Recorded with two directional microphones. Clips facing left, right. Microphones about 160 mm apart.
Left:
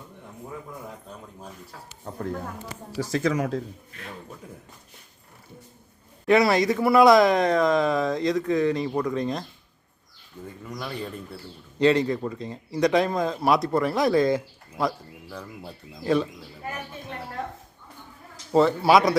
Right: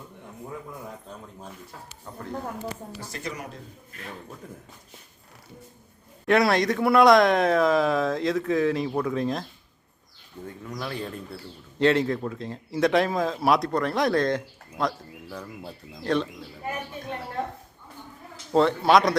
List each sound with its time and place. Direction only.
2.1 s speech: 35° left (ahead or behind)
2.9 s speech: 90° left
6.2 s a man's voice: centre (ahead or behind)
18.5 s a man's voice: centre (ahead or behind)